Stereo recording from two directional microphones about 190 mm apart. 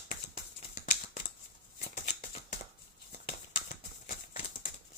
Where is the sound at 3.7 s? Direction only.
40° left (ahead or behind).